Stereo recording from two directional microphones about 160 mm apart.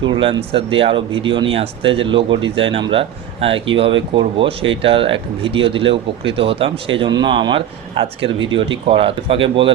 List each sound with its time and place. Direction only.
0.0 s speech: 30° right (ahead or behind)